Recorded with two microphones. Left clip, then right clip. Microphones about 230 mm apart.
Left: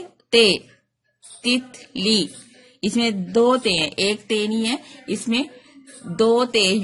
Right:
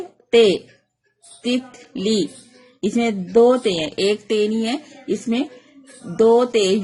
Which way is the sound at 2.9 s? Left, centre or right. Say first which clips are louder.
Right 3 dB; left.